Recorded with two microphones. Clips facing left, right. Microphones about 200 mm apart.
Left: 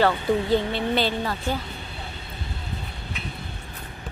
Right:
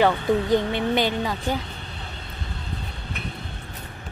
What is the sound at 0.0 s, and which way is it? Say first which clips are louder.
Speech: right 1 dB; 15° right (ahead or behind).